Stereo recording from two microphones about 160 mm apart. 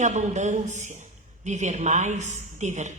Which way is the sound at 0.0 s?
45° right (ahead or behind).